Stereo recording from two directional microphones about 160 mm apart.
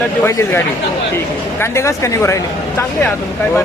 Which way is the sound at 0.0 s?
15° left (ahead or behind).